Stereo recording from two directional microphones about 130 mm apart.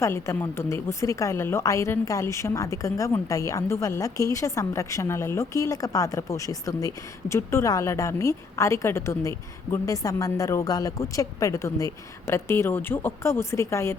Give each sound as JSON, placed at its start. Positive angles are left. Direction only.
{"t": 0.0, "sound": "a woman's voice", "side_deg": 20}